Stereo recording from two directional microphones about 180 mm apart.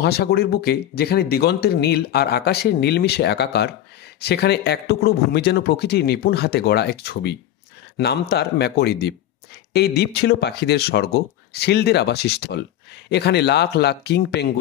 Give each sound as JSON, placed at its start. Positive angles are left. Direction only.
{"t": 0.0, "sound": "speech", "side_deg": 60}